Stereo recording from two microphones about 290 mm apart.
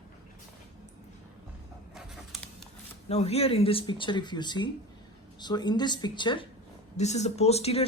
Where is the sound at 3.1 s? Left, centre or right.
Left.